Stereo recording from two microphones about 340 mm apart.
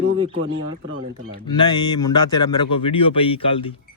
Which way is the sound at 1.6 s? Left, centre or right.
Centre.